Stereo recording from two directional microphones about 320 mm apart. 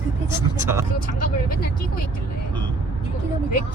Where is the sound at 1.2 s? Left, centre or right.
Left.